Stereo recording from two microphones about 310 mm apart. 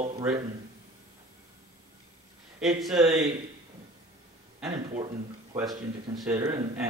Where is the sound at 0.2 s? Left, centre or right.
Centre.